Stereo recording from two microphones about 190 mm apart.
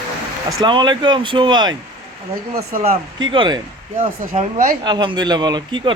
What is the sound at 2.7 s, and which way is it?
Speech, 45° right (ahead or behind).